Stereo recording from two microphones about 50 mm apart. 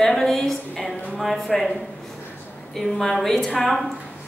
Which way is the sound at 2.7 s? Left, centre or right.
Centre.